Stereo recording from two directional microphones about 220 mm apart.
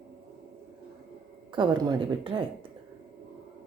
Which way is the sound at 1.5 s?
20° right (ahead or behind).